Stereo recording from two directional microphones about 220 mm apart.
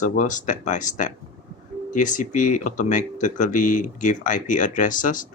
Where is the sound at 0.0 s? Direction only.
35° left (ahead or behind).